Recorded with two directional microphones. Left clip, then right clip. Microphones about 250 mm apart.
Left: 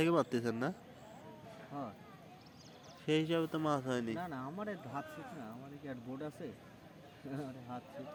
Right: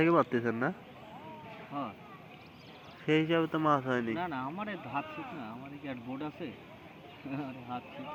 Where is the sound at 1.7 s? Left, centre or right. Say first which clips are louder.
Right 6 dB; left.